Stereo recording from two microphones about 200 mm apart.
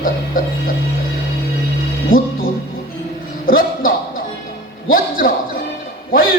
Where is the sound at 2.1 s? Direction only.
85° left.